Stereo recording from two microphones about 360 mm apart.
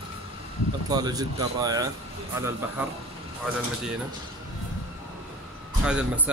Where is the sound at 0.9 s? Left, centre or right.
Centre.